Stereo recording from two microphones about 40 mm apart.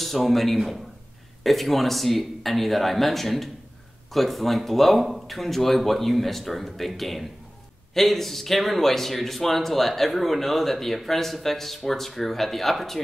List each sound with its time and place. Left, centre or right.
0.0 s a man's voice: centre